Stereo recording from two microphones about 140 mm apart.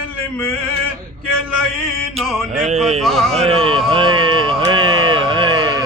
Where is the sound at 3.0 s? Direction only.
Centre (ahead or behind).